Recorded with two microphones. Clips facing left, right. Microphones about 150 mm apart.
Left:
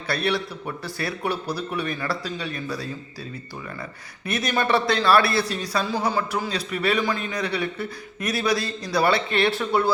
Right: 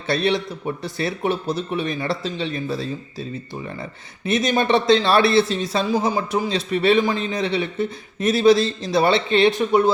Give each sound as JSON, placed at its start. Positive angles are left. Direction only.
{"t": 0.1, "sound": "a man's voice", "side_deg": -25}
{"t": 4.3, "sound": "a man's voice", "side_deg": -20}